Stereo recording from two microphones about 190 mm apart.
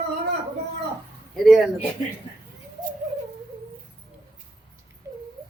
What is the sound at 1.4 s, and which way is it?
Speech, centre (ahead or behind).